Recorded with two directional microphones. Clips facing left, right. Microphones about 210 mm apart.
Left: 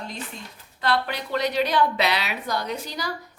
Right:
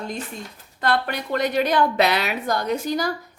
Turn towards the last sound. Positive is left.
turn(degrees=-50)  # may be behind; listen again after turning